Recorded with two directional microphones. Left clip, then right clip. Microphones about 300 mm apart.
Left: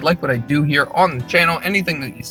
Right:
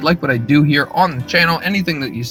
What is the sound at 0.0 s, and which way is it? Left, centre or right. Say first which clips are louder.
Speech: right 2 dB; centre.